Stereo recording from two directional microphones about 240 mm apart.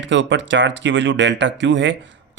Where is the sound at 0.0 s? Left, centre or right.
Right.